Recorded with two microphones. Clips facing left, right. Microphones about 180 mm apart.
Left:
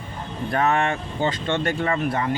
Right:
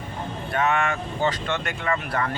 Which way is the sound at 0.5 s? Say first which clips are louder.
Left 2 dB; 35° left (ahead or behind).